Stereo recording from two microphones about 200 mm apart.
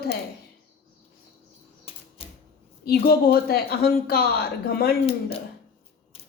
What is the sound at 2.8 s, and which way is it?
A woman's voice, 50° left (ahead or behind).